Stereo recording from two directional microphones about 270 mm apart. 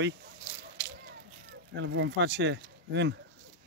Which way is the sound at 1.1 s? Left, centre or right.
Right.